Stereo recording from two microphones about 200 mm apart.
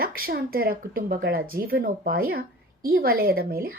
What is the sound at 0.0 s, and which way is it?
A woman's voice, 45° right (ahead or behind).